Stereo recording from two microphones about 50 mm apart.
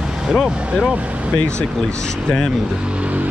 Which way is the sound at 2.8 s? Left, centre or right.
Right.